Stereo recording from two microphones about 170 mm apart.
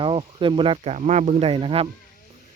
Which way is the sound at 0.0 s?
30° right (ahead or behind).